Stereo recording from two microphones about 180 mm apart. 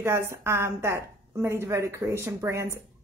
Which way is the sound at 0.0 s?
15° right (ahead or behind).